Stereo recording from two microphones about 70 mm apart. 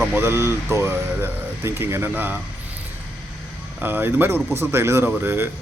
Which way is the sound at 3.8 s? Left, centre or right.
Right.